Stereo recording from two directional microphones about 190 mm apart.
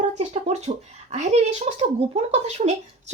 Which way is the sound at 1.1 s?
35° right (ahead or behind).